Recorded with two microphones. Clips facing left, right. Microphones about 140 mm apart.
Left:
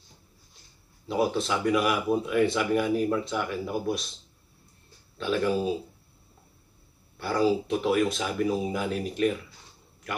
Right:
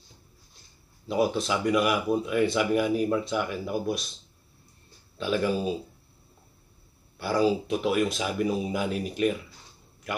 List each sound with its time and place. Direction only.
1.0 s speech: centre (ahead or behind)
5.1 s speech: 5° right (ahead or behind)
7.2 s speech: centre (ahead or behind)